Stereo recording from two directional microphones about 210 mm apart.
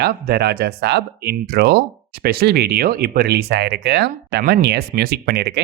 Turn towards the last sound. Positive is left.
turn(degrees=-50)  # may be behind; listen again after turning